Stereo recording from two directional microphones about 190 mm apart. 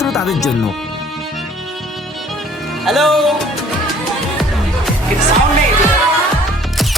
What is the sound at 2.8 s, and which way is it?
Music, centre (ahead or behind).